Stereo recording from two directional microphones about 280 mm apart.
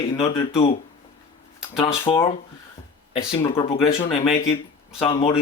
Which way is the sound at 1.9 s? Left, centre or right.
Centre.